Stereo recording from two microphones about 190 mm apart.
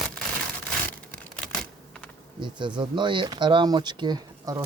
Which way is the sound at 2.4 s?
25° right (ahead or behind).